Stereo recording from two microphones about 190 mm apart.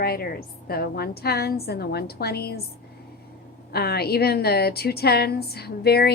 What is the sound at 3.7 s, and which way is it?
A woman's voice, 55° left (ahead or behind).